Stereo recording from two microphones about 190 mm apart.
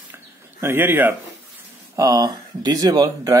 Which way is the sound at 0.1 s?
10° right (ahead or behind).